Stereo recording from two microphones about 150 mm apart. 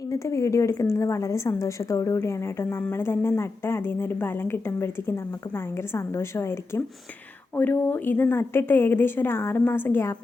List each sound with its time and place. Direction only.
0.1 s a woman's voice: 20° left (ahead or behind)